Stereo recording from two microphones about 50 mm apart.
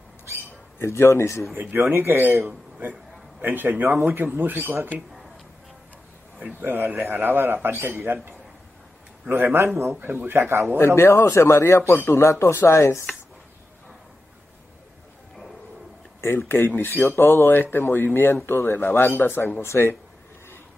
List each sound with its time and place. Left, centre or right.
0.7 s speech: left
1.5 s a man's voice: right
2.8 s a sound: right
3.4 s speech: right
4.0 s a man's voice: right
6.6 s a man's voice: right
11.0 s speech: left
12.0 s speech: left
12.3 s speech: left
16.2 s speech: left
19.6 s speech: left